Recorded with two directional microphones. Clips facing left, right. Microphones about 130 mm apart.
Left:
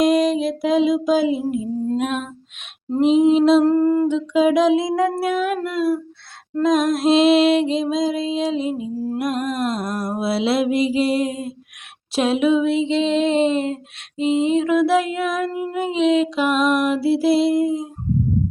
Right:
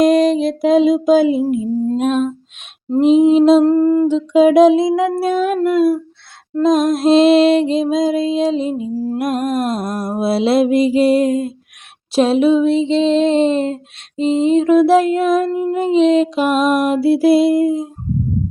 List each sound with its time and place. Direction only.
0.0 s music: 40° right (ahead or behind)
2.0 s music: 30° right (ahead or behind)
3.1 s mantra: 45° right (ahead or behind)
3.6 s humming: 20° right (ahead or behind)
4.1 s mantra: 45° right (ahead or behind)
4.9 s humming: 20° right (ahead or behind)
5.3 s music: 35° right (ahead or behind)
9.0 s mantra: 50° right (ahead or behind)
12.1 s music: 35° right (ahead or behind)
15.7 s mantra: 35° right (ahead or behind); by 17.8 s 50° right (ahead or behind)